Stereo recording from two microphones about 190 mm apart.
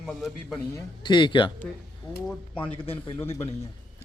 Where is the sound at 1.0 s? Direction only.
25° left (ahead or behind).